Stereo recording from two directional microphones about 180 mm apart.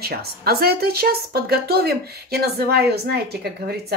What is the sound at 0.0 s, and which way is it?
A woman's voice, 60° right (ahead or behind).